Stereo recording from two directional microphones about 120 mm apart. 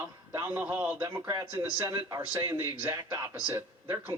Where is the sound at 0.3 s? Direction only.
15° right (ahead or behind).